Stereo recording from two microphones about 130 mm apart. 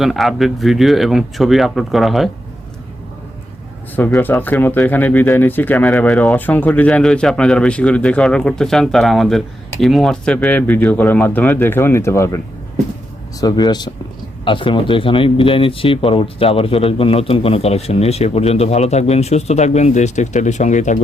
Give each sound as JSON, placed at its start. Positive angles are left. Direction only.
{"t": 0.0, "sound": "speech", "side_deg": 0}
{"t": 3.9, "sound": "speech", "side_deg": 15}
{"t": 13.4, "sound": "speech", "side_deg": 30}